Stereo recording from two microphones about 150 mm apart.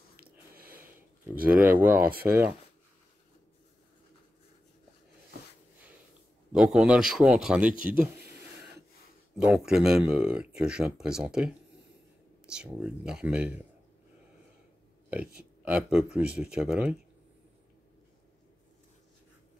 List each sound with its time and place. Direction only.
0.1 s a sound: 90° right
1.4 s speech: 10° right (ahead or behind)
6.5 s speech: 5° right (ahead or behind)
9.4 s speech: 5° right (ahead or behind)
15.0 s speech: 10° right (ahead or behind)